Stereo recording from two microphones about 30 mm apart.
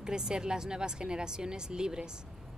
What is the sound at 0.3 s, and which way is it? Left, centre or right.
Speech, right.